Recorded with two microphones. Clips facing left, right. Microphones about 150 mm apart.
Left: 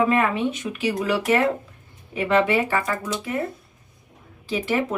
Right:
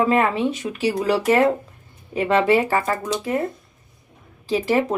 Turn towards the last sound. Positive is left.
turn(degrees=-35)  # may be behind; listen again after turning